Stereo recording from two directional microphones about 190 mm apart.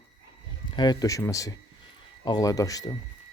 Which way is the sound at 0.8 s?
20° left (ahead or behind).